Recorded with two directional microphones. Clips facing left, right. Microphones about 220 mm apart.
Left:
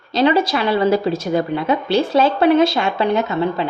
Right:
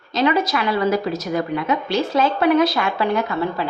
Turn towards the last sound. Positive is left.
turn(degrees=25)  # may be behind; listen again after turning